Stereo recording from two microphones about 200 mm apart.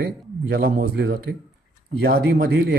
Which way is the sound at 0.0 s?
50° right (ahead or behind).